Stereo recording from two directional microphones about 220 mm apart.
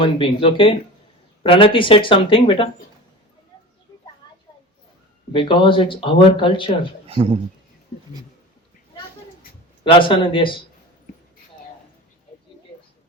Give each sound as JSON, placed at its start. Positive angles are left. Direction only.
{"t": 0.0, "sound": "a man's voice", "side_deg": 25}
{"t": 5.3, "sound": "a man's voice", "side_deg": 20}
{"t": 7.1, "sound": "speech", "side_deg": -25}
{"t": 9.8, "sound": "a man's voice", "side_deg": 20}